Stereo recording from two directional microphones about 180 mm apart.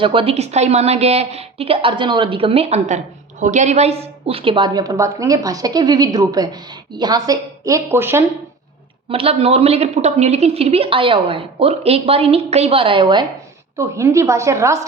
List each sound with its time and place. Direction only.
0.0 s a woman's voice: 30° right (ahead or behind); by 8.2 s 15° right (ahead or behind)
9.0 s a woman's voice: 30° right (ahead or behind)
13.7 s a woman's voice: 15° right (ahead or behind)